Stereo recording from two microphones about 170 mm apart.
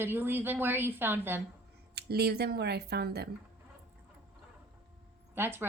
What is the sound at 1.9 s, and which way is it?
Speech, 70° right (ahead or behind).